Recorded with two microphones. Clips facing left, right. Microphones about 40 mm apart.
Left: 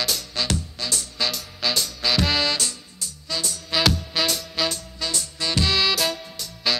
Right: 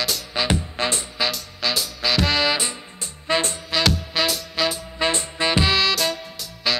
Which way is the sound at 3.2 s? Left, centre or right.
Right.